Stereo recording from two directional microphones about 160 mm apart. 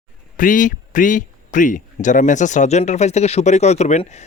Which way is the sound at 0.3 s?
55° left (ahead or behind).